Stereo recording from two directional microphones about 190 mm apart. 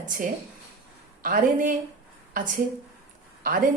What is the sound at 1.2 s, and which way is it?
Speech, 45° right (ahead or behind).